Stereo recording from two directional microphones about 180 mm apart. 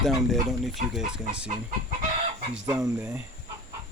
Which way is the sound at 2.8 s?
5° right (ahead or behind).